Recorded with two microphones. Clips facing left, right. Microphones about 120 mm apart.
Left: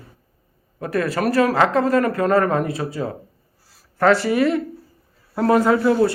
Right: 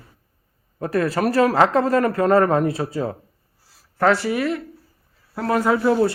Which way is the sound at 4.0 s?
15° right (ahead or behind).